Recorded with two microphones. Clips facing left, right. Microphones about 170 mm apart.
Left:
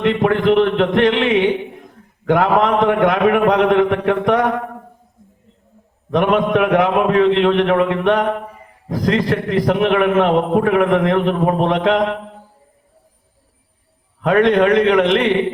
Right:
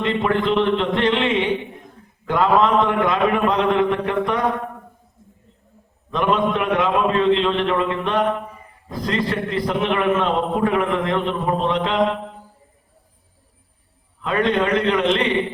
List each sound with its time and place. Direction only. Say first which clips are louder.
0.0 s a man's voice: left 5 dB; 75° left (ahead or behind)
2.2 s a man's voice: left 3 dB; 85° left
6.1 s a man's voice: left 4 dB; 85° left
8.9 s a man's voice: left 5 dB; 90° left; by 12.1 s 75° left (ahead or behind)
14.2 s a man's voice: left 7 dB; 75° left (ahead or behind)